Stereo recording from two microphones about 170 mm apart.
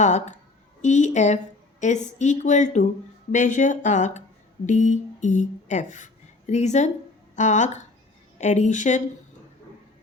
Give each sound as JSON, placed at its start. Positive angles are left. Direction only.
{"t": 0.0, "sound": "a woman's voice", "side_deg": 45}